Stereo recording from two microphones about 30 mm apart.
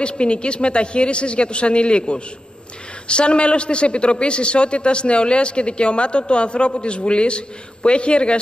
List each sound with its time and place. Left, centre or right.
0.2 s a man's voice: left